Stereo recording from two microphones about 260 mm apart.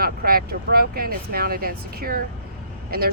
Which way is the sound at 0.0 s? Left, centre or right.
Right.